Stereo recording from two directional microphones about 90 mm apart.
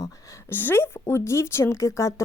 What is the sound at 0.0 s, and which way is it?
A woman's voice, 35° left (ahead or behind).